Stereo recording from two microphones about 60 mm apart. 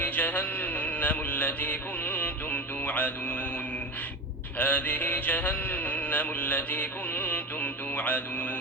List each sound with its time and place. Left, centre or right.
0.0 s music: left
4.5 s music: left